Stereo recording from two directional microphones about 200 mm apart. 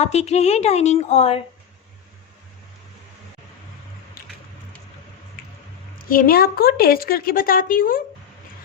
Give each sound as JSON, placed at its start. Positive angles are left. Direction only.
{"t": 0.0, "sound": "speech", "side_deg": 35}
{"t": 6.1, "sound": "a woman's voice", "side_deg": 45}